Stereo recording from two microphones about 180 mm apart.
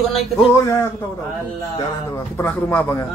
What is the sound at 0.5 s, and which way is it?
Speech, 15° left (ahead or behind).